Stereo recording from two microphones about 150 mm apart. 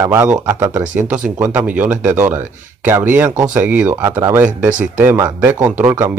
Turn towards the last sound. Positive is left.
turn(degrees=-15)  # may be behind; listen again after turning